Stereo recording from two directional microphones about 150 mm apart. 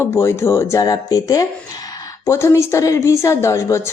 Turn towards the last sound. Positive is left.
turn(degrees=20)  # may be behind; listen again after turning